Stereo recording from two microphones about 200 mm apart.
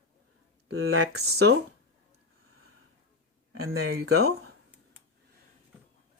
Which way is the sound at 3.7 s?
90° right.